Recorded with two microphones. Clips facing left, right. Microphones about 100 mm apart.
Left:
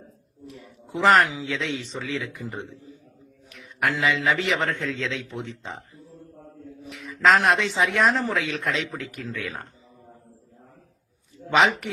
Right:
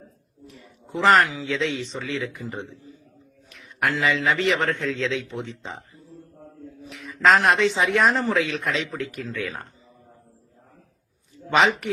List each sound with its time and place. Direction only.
0.4 s a sound: 5° left (ahead or behind)
1.2 s speech: 20° left (ahead or behind)
1.5 s speech: centre (ahead or behind)
3.6 s a sound: centre (ahead or behind)
4.0 s speech: centre (ahead or behind)
6.9 s speech: centre (ahead or behind)
11.4 s speech: centre (ahead or behind)